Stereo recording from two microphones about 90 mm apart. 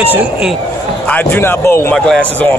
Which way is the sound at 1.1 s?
25° left (ahead or behind).